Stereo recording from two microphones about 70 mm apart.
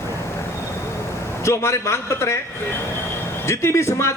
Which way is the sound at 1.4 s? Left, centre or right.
Left.